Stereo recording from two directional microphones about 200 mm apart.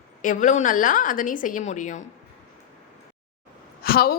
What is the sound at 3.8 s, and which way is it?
Speech, 50° left (ahead or behind).